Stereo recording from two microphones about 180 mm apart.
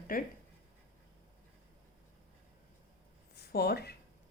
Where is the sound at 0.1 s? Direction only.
50° left (ahead or behind).